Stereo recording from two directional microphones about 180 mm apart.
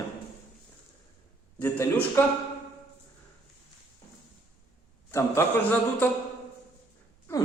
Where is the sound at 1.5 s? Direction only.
10° left (ahead or behind).